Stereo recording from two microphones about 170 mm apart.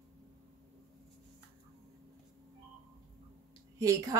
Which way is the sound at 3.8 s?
20° right (ahead or behind).